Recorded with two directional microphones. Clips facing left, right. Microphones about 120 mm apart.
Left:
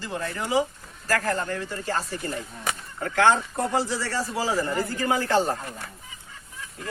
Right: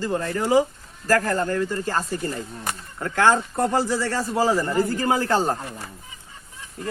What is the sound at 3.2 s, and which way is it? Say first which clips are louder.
A man's voice: right 2 dB; 45° right (ahead or behind).